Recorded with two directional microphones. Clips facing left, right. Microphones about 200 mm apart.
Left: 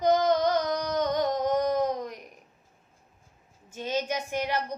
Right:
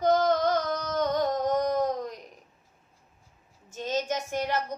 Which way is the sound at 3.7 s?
10° left (ahead or behind).